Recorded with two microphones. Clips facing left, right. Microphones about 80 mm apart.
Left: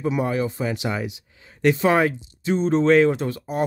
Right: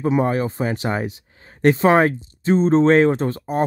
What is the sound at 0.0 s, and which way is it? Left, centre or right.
Speech, right.